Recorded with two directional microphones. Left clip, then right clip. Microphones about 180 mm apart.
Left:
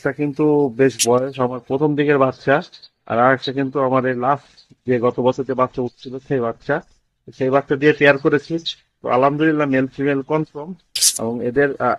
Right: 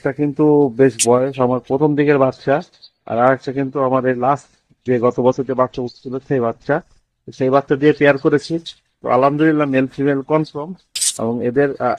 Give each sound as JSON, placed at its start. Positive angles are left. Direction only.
{"t": 0.0, "sound": "speech", "side_deg": -10}
{"t": 1.3, "sound": "speech", "side_deg": 0}
{"t": 6.6, "sound": "a sound", "side_deg": -20}
{"t": 7.4, "sound": "speech", "side_deg": -10}